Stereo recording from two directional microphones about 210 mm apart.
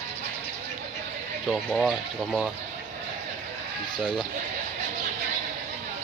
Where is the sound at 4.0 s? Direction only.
Centre (ahead or behind).